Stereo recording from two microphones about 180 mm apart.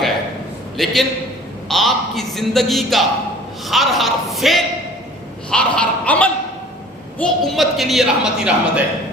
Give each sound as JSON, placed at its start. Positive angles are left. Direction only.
{"t": 0.8, "sound": "a woman's voice", "side_deg": 0}